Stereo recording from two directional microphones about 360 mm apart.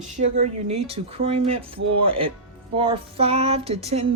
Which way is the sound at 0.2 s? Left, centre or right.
Centre.